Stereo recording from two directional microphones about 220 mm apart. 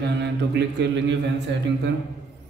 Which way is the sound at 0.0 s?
50° right (ahead or behind).